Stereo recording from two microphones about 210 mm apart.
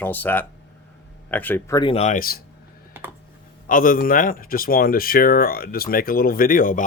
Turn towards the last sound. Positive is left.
turn(degrees=40)  # may be behind; listen again after turning